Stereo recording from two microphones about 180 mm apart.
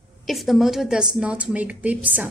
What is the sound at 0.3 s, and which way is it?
A woman's voice, centre (ahead or behind).